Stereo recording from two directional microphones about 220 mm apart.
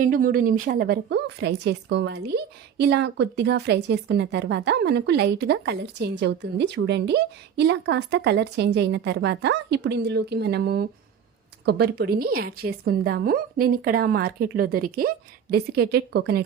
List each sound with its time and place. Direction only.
0.0 s a woman's voice: 40° right (ahead or behind)